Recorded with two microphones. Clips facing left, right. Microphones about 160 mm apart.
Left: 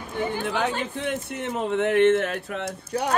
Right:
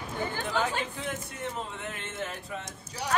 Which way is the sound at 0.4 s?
70° left (ahead or behind).